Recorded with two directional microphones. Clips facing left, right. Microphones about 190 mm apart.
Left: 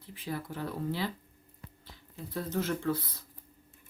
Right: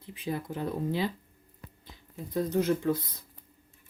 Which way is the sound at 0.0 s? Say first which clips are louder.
Right 4 dB; 20° right (ahead or behind).